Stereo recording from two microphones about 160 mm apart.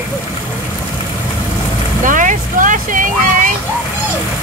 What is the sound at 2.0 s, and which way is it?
Vehicle, 55° right (ahead or behind).